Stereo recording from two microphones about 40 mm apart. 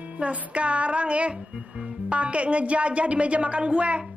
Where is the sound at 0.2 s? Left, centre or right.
Right.